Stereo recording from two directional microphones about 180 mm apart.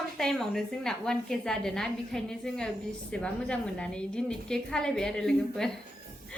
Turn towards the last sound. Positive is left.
turn(degrees=5)  # may be behind; listen again after turning